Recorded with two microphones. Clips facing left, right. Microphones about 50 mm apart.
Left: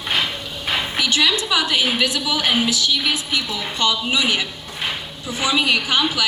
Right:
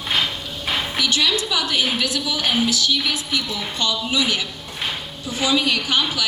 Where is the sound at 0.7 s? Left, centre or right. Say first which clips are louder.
Left 1 dB; left.